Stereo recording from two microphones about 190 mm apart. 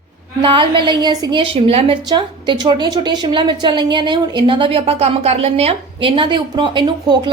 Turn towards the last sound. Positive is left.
turn(degrees=-25)  # may be behind; listen again after turning